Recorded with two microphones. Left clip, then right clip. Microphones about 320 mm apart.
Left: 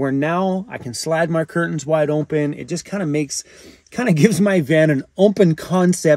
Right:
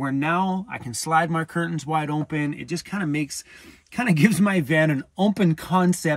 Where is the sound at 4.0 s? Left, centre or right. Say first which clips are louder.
Left 5 dB; centre.